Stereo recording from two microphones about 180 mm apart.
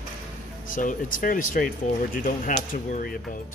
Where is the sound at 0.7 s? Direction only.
50° left (ahead or behind).